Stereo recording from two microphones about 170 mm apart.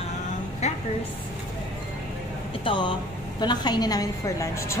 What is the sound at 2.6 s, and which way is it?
A woman's voice, 30° left (ahead or behind).